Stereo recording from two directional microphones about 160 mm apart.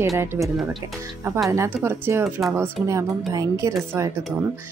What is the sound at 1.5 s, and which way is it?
Speech, 15° right (ahead or behind).